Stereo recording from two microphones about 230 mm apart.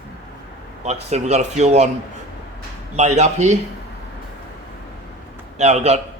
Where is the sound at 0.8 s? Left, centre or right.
Right.